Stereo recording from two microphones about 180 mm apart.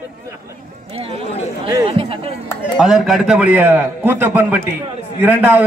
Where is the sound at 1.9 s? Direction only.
30° right (ahead or behind).